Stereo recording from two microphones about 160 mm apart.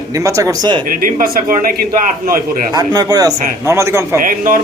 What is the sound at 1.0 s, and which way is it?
Speech, 60° right (ahead or behind).